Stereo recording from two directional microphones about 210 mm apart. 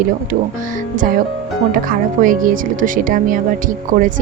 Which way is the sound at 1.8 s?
40° right (ahead or behind).